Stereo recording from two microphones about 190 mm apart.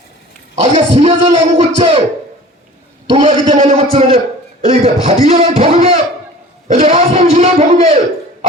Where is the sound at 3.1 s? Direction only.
35° right (ahead or behind).